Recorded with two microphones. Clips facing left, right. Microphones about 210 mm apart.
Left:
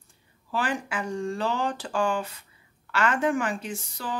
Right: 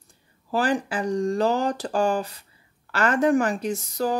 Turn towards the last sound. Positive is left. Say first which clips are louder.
# right 9 dB
turn(degrees=-40)  # may be behind; listen again after turning